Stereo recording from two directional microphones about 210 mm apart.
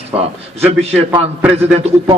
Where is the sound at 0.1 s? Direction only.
30° right (ahead or behind).